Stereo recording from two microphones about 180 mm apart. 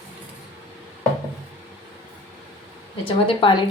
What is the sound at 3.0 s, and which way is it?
Speech, 30° left (ahead or behind).